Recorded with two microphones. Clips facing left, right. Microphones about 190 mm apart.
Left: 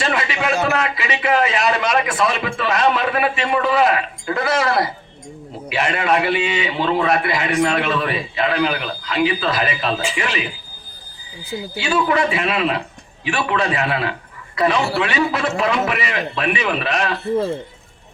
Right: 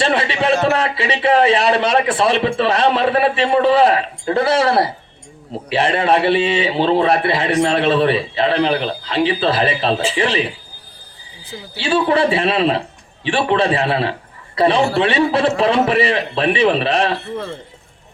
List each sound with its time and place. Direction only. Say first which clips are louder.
0.0 s a sound: right 4 dB; 30° right (ahead or behind)
0.6 s a man's voice: right 3 dB; 30° right (ahead or behind)
11.7 s a man's voice: right 3 dB; 30° right (ahead or behind)
17.3 s speech: left 6 dB; 25° left (ahead or behind)